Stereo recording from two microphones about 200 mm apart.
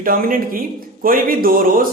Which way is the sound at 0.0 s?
45° right (ahead or behind).